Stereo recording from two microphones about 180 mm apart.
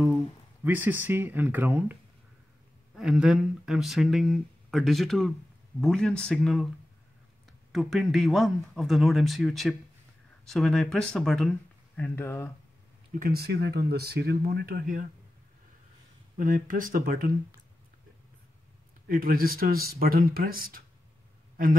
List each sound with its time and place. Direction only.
0.7 s speech: 10° right (ahead or behind)
7.7 s speech: centre (ahead or behind)
12.0 s speech: 15° left (ahead or behind)
13.1 s speech: 55° right (ahead or behind)
16.3 s speech: 50° right (ahead or behind)
19.0 s speech: 55° right (ahead or behind)